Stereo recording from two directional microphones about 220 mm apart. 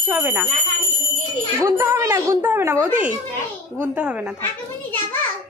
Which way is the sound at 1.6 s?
10° right (ahead or behind).